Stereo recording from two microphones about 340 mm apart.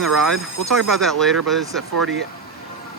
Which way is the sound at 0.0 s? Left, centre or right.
Centre.